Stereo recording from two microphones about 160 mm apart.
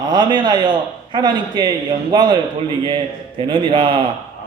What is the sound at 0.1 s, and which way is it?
A man's voice, 30° right (ahead or behind).